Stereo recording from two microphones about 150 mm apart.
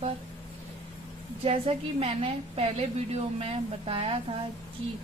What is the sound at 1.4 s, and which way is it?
A woman's voice, 40° right (ahead or behind).